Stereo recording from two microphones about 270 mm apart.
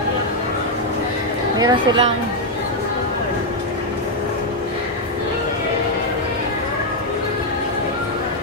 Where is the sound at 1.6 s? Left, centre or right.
Centre.